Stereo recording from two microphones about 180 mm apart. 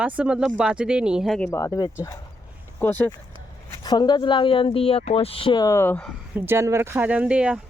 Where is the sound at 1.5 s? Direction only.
15° left (ahead or behind).